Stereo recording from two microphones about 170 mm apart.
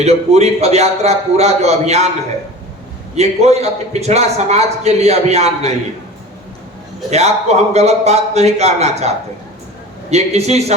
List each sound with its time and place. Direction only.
0.0 s a man's voice: 40° right (ahead or behind)
3.2 s a man's voice: 40° right (ahead or behind)
7.1 s a man's voice: 40° right (ahead or behind)